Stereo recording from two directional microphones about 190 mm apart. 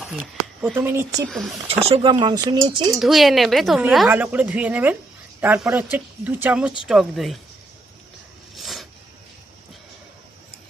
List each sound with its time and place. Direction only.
0.0 s a sound: 5° right (ahead or behind)
0.8 s a woman's voice: 10° right (ahead or behind)
1.3 s speech: centre (ahead or behind)
1.9 s speech: 30° right (ahead or behind)
3.0 s a woman's voice: centre (ahead or behind)
8.5 s a sound: centre (ahead or behind)